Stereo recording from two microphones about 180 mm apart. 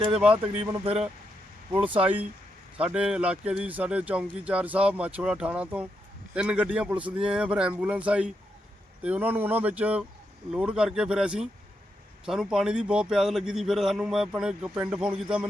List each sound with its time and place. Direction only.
0.3 s speech: 30° right (ahead or behind)
2.7 s a man's voice: 5° right (ahead or behind)